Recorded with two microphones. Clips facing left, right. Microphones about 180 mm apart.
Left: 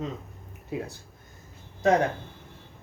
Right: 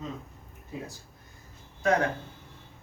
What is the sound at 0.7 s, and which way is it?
Speech, 65° left (ahead or behind).